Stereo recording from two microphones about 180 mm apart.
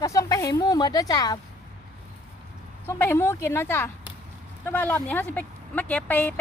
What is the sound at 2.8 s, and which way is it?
Speech, 10° left (ahead or behind).